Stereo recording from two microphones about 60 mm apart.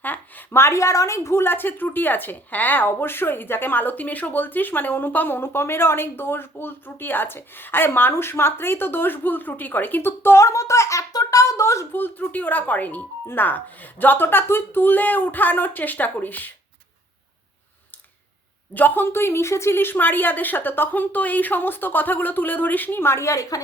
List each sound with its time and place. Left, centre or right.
0.0 s a sound: left
0.6 s a woman's voice: left
10.4 s a sound: left
11.9 s a woman's voice: left
18.7 s a woman's voice: left
23.3 s a woman's voice: left